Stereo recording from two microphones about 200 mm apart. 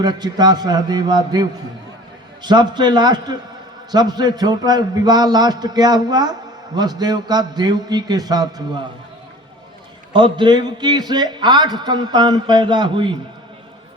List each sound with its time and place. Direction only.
0.0 s a man's voice: 20° right (ahead or behind)
10.1 s a man's voice: 25° right (ahead or behind)